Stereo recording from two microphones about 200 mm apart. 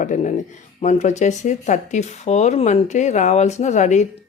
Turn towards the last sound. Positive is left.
turn(degrees=35)  # may be behind; listen again after turning